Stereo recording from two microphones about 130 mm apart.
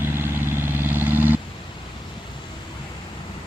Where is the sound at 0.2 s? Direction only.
15° right (ahead or behind).